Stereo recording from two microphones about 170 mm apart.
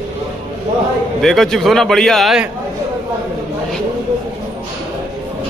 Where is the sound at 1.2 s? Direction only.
Centre (ahead or behind).